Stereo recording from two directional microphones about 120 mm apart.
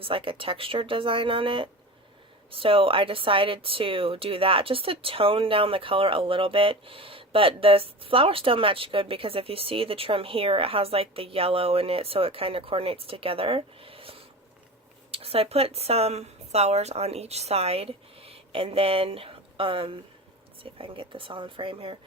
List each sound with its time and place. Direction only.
0.0 s a woman's voice: 45° right (ahead or behind)